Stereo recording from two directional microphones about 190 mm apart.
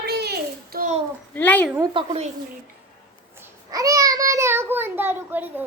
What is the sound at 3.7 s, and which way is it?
A child's voice, 20° right (ahead or behind).